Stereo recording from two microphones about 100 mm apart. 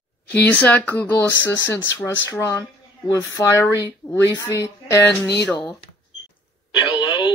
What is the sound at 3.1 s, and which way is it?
Speech, 30° left (ahead or behind).